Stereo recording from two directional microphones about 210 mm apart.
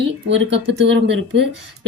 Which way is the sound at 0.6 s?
55° right (ahead or behind).